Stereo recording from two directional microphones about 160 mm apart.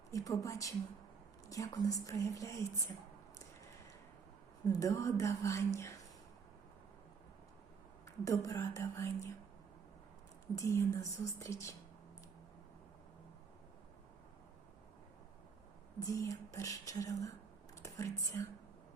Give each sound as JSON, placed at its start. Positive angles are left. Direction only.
{"t": 0.1, "sound": "a woman's voice", "side_deg": 20}
{"t": 4.7, "sound": "a woman's voice", "side_deg": 20}
{"t": 8.0, "sound": "a woman's voice", "side_deg": 20}
{"t": 10.5, "sound": "a woman's voice", "side_deg": 20}
{"t": 16.0, "sound": "a woman's voice", "side_deg": 20}